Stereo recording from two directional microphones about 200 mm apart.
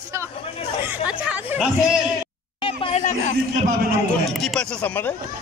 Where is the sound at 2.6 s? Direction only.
30° left (ahead or behind).